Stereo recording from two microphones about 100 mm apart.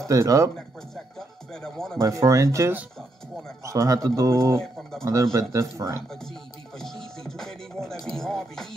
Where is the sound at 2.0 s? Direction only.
30° right (ahead or behind).